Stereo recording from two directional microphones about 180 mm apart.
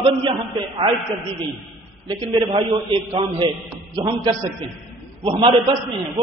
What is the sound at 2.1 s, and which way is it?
A man's voice, 30° right (ahead or behind).